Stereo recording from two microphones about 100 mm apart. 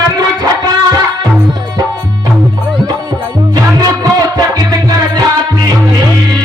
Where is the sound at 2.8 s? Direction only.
40° right (ahead or behind).